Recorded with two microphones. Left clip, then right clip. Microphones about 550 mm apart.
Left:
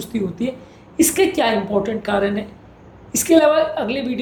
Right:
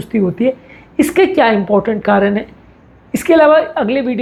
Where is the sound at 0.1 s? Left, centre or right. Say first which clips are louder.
Right 10 dB; right.